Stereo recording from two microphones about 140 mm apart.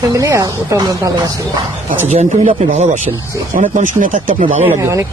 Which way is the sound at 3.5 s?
75° right (ahead or behind).